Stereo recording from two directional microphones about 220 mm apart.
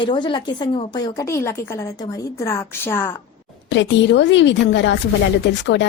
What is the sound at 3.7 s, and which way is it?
Speech, 55° left (ahead or behind).